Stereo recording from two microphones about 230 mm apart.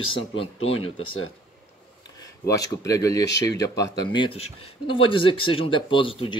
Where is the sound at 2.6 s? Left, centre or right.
Centre.